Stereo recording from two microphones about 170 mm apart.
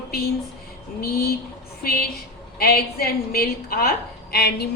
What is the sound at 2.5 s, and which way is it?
A woman's voice, 65° left (ahead or behind).